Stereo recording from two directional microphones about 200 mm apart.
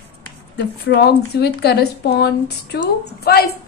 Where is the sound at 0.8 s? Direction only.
55° left (ahead or behind).